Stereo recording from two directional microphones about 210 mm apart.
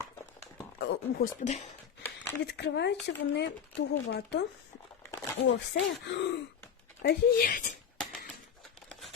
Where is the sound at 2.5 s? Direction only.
55° left (ahead or behind).